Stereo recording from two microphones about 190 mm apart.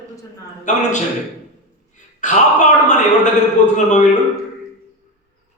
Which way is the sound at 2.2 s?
40° left (ahead or behind).